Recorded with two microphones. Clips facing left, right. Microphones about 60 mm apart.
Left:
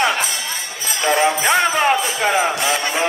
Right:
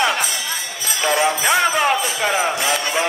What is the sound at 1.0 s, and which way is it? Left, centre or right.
Jingle bell, left.